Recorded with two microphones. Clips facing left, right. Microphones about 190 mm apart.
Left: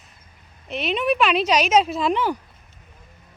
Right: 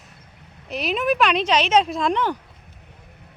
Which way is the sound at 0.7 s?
Centre (ahead or behind).